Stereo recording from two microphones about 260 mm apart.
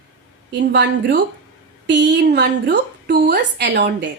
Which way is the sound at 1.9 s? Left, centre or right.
Right.